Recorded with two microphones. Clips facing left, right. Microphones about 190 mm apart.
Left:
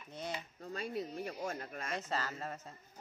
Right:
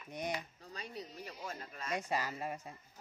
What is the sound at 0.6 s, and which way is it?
Speech, 50° left (ahead or behind).